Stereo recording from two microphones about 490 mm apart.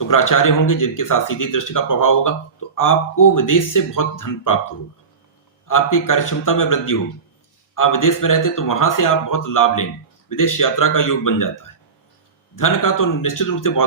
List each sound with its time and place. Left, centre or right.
0.1 s speech: left
5.6 s speech: left